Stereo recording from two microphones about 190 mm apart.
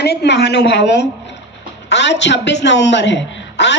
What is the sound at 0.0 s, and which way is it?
A woman's voice, 60° left (ahead or behind).